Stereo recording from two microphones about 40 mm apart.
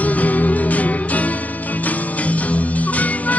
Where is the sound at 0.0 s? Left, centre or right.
Left.